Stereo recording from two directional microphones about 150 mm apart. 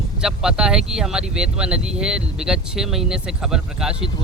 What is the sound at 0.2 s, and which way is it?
Speech, 5° right (ahead or behind).